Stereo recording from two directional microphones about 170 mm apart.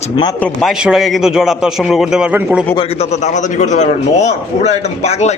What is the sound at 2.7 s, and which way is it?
A man's voice, 35° left (ahead or behind).